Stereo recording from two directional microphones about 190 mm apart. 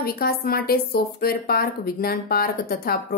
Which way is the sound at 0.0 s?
55° left (ahead or behind).